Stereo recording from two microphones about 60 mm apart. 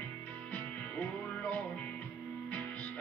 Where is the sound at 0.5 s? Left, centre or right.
Left.